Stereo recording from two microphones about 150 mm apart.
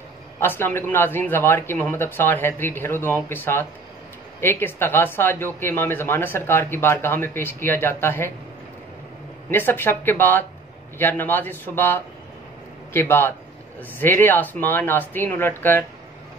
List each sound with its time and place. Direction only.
0.4 s speech: 15° left (ahead or behind)
9.5 s speech: 15° left (ahead or behind)